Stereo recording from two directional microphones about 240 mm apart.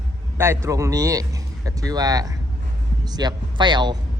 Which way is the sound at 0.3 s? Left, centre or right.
Centre.